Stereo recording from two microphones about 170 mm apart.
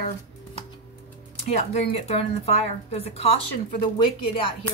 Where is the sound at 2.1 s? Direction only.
35° left (ahead or behind).